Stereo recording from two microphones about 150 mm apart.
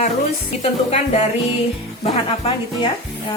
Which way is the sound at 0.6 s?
45° left (ahead or behind).